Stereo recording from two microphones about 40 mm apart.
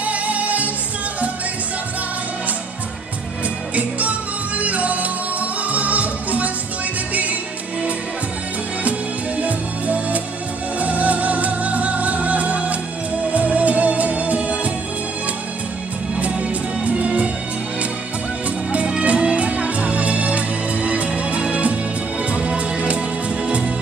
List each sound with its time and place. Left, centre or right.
0.0 s music: right
4.6 s music: right
9.4 s music: right
16.2 s music: right
18.9 s music: right